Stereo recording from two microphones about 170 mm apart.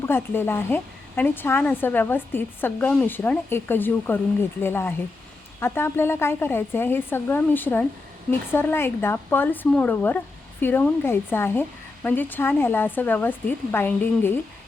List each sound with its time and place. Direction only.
0.0 s a woman's voice: 15° left (ahead or behind)